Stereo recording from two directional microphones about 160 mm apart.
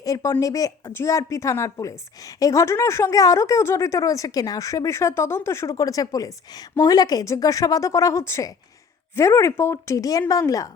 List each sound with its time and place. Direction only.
0.0 s speech: 20° left (ahead or behind)